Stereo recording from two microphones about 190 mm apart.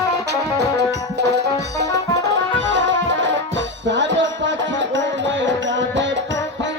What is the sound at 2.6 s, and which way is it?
Music, 75° right (ahead or behind).